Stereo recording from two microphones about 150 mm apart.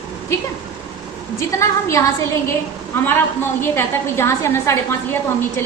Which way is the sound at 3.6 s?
15° left (ahead or behind).